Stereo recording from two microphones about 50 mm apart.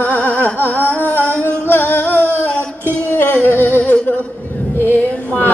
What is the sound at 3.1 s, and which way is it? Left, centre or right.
Humming, left.